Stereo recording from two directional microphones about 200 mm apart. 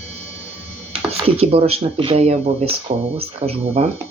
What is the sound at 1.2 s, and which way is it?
Speech, 30° right (ahead or behind).